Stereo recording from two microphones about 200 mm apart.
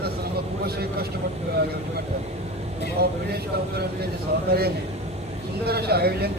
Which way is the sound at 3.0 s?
55° right (ahead or behind).